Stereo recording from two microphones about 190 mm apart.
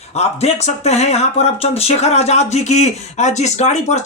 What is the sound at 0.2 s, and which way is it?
Speech, 35° left (ahead or behind).